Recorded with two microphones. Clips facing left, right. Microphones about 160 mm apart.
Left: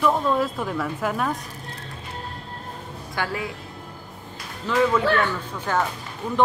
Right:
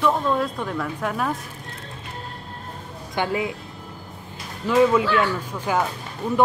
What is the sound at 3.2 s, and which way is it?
Speech, 20° right (ahead or behind).